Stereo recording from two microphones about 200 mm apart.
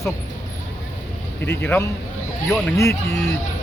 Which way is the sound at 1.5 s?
10° left (ahead or behind).